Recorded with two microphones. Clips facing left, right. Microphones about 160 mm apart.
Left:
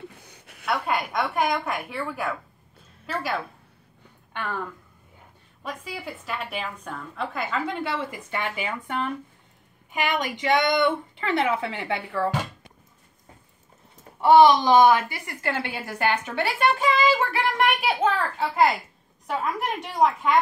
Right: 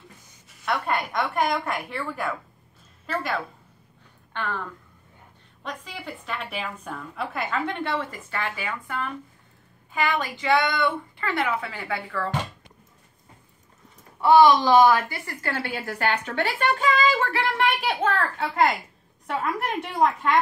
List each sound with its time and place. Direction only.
0.2 s a sound: 65° left (ahead or behind)
0.7 s a woman's voice: centre (ahead or behind)
5.6 s a woman's voice: 5° left (ahead or behind)
8.3 s a woman's voice: 20° left (ahead or behind)
14.2 s a woman's voice: 20° left (ahead or behind); by 20.3 s centre (ahead or behind)